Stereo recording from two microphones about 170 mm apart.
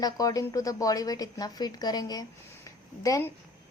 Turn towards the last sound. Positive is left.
turn(degrees=15)  # may be behind; listen again after turning